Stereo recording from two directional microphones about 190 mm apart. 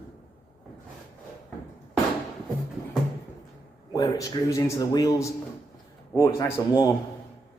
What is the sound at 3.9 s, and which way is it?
Speech, 20° left (ahead or behind).